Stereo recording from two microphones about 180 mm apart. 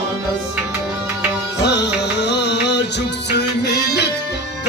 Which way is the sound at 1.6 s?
70° left (ahead or behind).